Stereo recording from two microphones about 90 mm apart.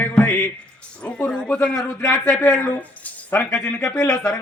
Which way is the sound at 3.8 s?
40° left (ahead or behind).